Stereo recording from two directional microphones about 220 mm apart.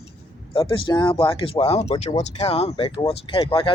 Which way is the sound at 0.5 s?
20° left (ahead or behind).